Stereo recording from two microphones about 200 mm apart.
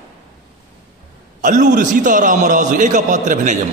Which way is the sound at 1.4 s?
40° right (ahead or behind).